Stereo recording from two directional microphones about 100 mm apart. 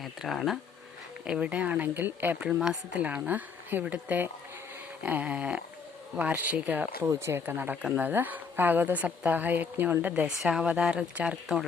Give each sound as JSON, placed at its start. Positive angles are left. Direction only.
{"t": 0.0, "sound": "speech", "side_deg": 0}
{"t": 1.2, "sound": "a woman's voice", "side_deg": -10}